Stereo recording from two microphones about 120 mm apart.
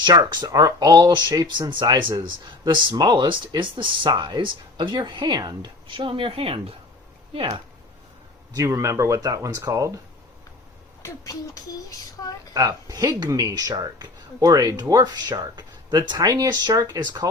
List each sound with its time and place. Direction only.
0.0 s speech: 35° right (ahead or behind)
8.5 s speech: 25° right (ahead or behind)
11.0 s speech: 25° left (ahead or behind)
12.5 s speech: 30° right (ahead or behind)